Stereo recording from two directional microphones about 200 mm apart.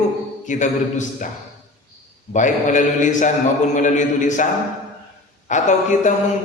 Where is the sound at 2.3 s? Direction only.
40° left (ahead or behind).